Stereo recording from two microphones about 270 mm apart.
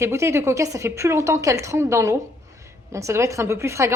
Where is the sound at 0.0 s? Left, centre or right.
Centre.